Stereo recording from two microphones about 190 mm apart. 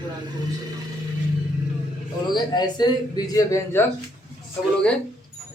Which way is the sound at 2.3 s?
20° left (ahead or behind).